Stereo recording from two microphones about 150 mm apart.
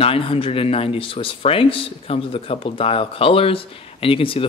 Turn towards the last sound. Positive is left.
turn(degrees=35)  # may be behind; listen again after turning